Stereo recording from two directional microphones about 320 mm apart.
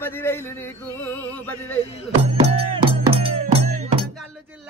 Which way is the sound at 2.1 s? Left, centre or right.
Centre.